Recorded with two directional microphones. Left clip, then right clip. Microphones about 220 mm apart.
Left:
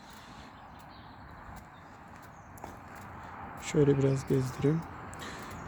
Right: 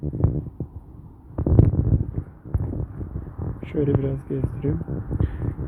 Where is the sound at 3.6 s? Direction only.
15° left (ahead or behind).